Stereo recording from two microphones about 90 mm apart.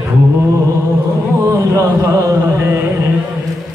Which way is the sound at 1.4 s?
35° right (ahead or behind).